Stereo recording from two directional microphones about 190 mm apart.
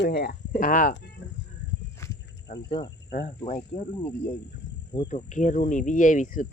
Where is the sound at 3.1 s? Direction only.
55° left (ahead or behind).